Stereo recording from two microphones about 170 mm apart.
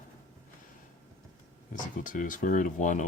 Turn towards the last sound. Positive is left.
turn(degrees=45)  # may be behind; listen again after turning